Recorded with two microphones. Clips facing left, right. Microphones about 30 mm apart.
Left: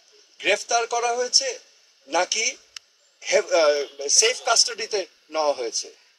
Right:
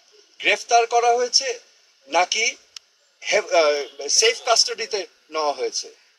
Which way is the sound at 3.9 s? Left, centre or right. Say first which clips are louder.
Right 2 dB; centre.